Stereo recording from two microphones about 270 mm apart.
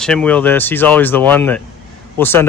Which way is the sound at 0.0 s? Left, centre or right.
Centre.